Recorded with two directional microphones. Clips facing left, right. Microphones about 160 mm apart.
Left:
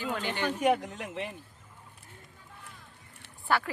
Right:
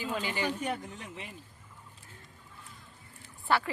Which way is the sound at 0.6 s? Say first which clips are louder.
Left 9 dB; 90° left.